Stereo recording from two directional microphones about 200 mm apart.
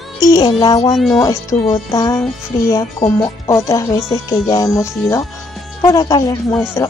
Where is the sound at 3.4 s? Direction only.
15° left (ahead or behind).